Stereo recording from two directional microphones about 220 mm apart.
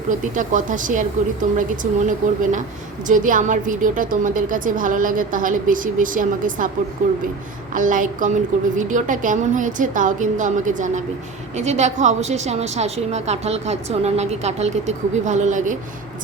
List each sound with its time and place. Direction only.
0.3 s a woman's voice: 35° right (ahead or behind)
7.7 s a woman's voice: 35° right (ahead or behind)